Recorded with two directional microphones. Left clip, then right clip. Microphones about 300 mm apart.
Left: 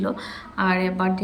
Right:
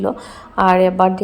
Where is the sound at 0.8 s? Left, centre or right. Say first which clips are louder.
Right 11 dB; right.